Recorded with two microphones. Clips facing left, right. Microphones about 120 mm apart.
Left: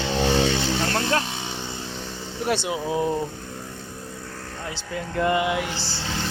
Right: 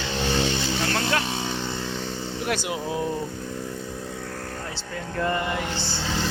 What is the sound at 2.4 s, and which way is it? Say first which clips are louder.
Speech: left 4 dB; 25° left (ahead or behind).